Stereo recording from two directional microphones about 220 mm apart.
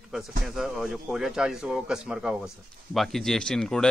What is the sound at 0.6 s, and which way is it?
Speech, centre (ahead or behind).